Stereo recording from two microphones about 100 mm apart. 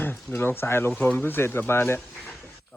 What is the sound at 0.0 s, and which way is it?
Speech, 20° left (ahead or behind).